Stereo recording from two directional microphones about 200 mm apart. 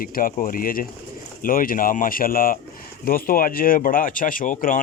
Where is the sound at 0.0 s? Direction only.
45° left (ahead or behind).